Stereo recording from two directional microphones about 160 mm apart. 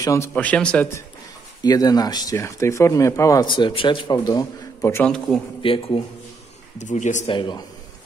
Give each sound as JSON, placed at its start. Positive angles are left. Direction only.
{"t": 0.0, "sound": "speech", "side_deg": 20}
{"t": 0.3, "sound": "speech", "side_deg": 5}
{"t": 1.6, "sound": "speech", "side_deg": 25}
{"t": 5.6, "sound": "a man's voice", "side_deg": 35}
{"t": 6.8, "sound": "speech", "side_deg": 50}
{"t": 7.2, "sound": "speech", "side_deg": 30}